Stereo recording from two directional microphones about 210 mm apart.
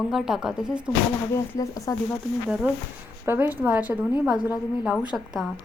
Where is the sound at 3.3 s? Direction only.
10° right (ahead or behind).